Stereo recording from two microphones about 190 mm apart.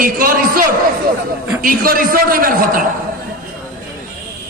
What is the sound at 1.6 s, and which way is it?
A man's voice, 45° right (ahead or behind).